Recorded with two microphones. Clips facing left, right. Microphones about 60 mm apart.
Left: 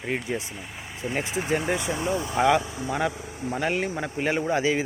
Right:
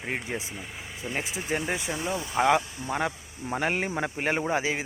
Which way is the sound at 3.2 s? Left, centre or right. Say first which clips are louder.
Left 6 dB; left.